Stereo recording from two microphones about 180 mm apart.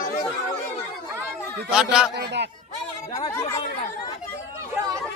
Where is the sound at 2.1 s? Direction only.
70° right (ahead or behind).